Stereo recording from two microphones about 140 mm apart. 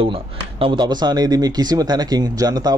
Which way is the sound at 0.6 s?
35° right (ahead or behind).